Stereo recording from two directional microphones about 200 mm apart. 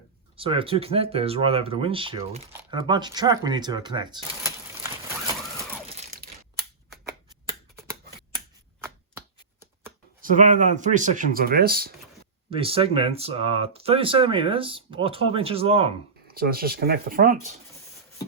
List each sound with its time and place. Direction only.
0.3 s speech: 25° right (ahead or behind)
8.8 s a sound: 10° right (ahead or behind)
10.2 s speech: 40° right (ahead or behind)
12.5 s speech: 30° right (ahead or behind)
16.2 s speech: 50° right (ahead or behind)